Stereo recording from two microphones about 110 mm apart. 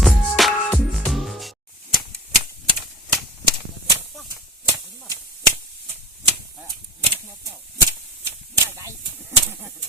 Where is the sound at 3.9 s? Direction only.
25° right (ahead or behind).